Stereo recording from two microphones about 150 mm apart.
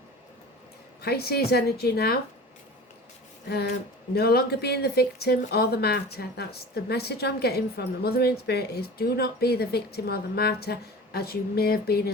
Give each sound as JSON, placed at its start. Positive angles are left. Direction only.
{"t": 1.0, "sound": "speech", "side_deg": 90}
{"t": 3.5, "sound": "speech", "side_deg": 90}